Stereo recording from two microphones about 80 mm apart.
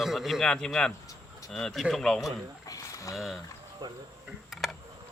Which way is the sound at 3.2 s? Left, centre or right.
Centre.